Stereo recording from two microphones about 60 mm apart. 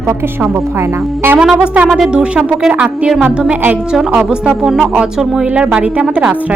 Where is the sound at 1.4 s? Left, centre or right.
Centre.